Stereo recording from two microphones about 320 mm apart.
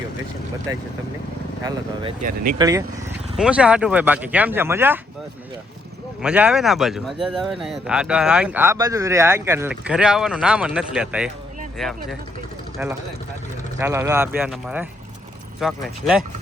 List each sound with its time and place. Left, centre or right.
1.6 s speech: centre
6.2 s speech: centre
13.7 s speech: centre